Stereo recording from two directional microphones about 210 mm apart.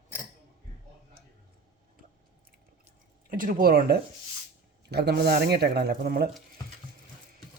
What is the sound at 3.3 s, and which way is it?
A woman's voice, 40° right (ahead or behind).